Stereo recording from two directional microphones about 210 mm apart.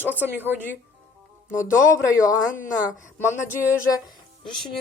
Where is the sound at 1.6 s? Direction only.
15° left (ahead or behind).